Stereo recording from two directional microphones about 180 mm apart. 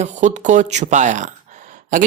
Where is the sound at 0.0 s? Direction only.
40° right (ahead or behind).